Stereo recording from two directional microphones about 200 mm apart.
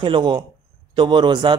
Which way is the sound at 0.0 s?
25° right (ahead or behind).